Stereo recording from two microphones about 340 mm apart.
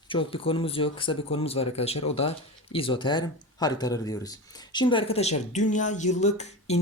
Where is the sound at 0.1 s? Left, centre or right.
Centre.